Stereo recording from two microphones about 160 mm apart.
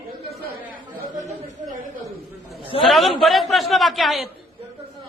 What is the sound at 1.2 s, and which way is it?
Chatter, 50° right (ahead or behind).